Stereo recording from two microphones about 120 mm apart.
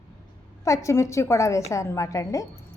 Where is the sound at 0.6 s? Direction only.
25° left (ahead or behind).